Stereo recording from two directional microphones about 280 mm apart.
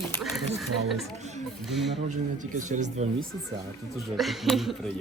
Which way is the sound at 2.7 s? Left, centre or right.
Right.